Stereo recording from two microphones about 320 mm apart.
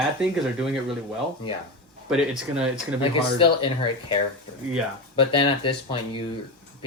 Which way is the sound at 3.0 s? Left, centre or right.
Centre.